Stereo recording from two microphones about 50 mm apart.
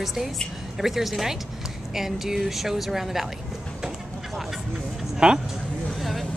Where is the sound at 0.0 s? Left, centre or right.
Centre.